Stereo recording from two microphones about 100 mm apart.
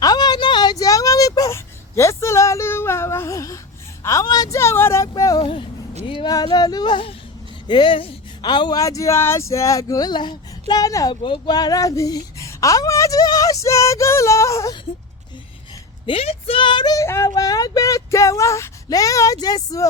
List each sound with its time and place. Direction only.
0.0 s whimper: 45° left (ahead or behind)
4.0 s speech: 35° left (ahead or behind)
5.4 s speech: 60° left (ahead or behind)
6.2 s speech: 45° left (ahead or behind); by 8.2 s 65° left (ahead or behind)
8.4 s speech: 50° left (ahead or behind)
8.8 s speech: 35° left (ahead or behind)
11.1 s speech: 55° left (ahead or behind); by 14.8 s 30° left (ahead or behind)
16.0 s speech: 80° left; by 16.9 s 50° left (ahead or behind)
16.9 s speech: 30° left (ahead or behind)